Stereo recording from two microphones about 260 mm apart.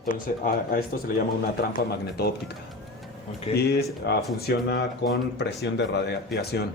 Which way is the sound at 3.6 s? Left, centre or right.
Left.